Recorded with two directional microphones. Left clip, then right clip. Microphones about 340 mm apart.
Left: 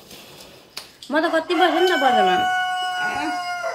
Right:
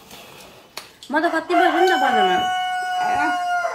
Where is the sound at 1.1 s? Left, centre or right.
Centre.